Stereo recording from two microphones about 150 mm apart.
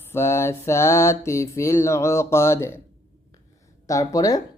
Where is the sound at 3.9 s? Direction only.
20° left (ahead or behind).